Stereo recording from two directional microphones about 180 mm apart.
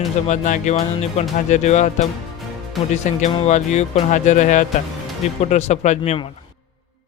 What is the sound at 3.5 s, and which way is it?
Speech, 40° left (ahead or behind).